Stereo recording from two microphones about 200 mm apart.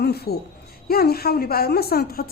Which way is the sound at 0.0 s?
55° left (ahead or behind).